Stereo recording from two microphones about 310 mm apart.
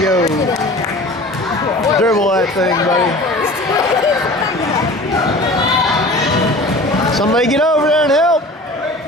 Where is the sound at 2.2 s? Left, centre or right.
Centre.